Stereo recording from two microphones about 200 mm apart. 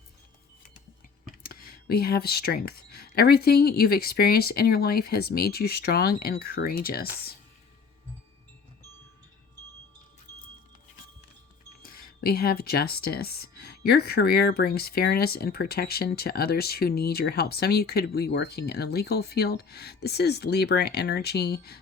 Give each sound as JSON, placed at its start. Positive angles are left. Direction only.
{"t": 1.4, "sound": "speech", "side_deg": 45}
{"t": 11.8, "sound": "speech", "side_deg": 45}